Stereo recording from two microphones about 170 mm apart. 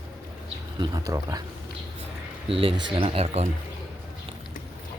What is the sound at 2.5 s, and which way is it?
Speech, 35° right (ahead or behind).